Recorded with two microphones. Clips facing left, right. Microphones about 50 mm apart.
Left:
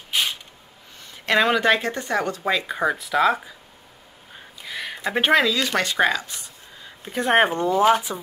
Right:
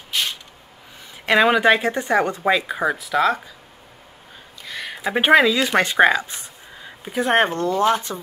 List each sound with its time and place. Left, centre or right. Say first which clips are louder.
0.1 s a sound: even; centre
1.1 s speech: right 3 dB; centre
2.5 s speech: right 2 dB; centre
4.6 s a sound: right 1 dB; centre; by 6.9 s right
7.1 s speech: even; centre
7.5 s speech: left 1 dB; centre